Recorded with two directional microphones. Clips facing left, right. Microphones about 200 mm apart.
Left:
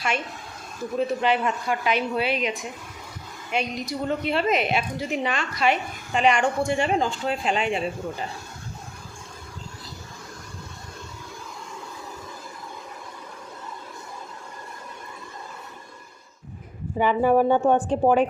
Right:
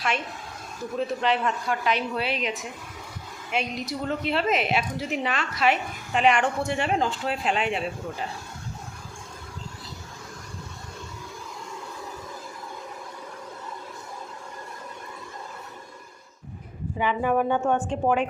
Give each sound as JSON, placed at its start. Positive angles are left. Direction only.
{"t": 0.9, "sound": "a woman's voice", "side_deg": 5}
{"t": 17.0, "sound": "speech", "side_deg": 40}